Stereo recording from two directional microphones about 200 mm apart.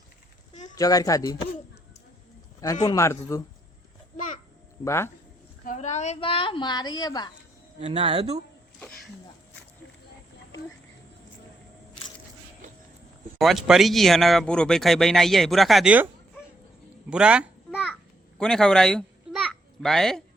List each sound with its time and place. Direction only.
0.8 s speech: 20° left (ahead or behind)
2.8 s speech: 15° left (ahead or behind)
4.8 s speech: 15° left (ahead or behind)
5.6 s a woman's voice: 35° left (ahead or behind); by 7.3 s 20° left (ahead or behind)
7.8 s speech: 30° right (ahead or behind)
13.4 s speech: centre (ahead or behind)
17.1 s a sound: 5° right (ahead or behind)
18.3 s babbling: 5° left (ahead or behind)